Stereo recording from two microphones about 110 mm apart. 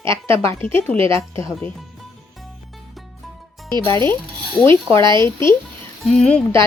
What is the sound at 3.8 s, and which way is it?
Speech, 30° left (ahead or behind).